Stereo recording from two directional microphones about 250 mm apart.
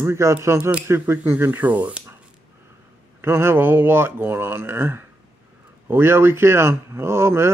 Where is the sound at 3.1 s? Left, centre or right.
Centre.